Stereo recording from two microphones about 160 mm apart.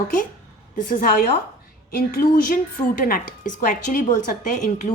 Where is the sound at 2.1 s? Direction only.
70° left (ahead or behind).